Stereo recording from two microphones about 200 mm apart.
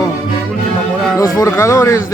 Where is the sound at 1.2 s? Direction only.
15° left (ahead or behind).